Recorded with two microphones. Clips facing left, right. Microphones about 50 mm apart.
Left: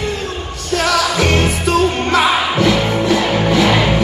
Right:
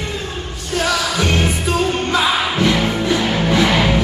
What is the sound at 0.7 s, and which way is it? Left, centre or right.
Music, centre.